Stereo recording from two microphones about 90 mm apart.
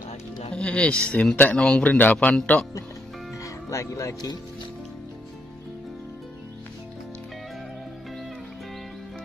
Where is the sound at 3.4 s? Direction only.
35° left (ahead or behind).